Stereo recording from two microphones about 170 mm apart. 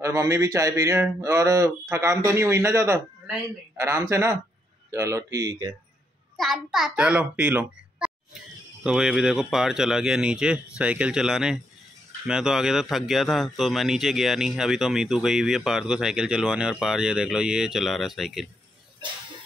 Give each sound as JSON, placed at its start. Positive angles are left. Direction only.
{"t": 0.0, "sound": "speech", "side_deg": -15}
{"t": 6.3, "sound": "a child's voice", "side_deg": 0}